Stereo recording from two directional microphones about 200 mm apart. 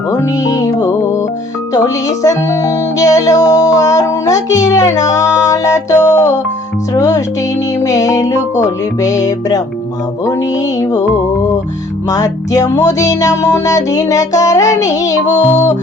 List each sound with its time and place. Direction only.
0.1 s music: 15° left (ahead or behind)
10.8 s music: 15° left (ahead or behind)
12.1 s music: 15° left (ahead or behind)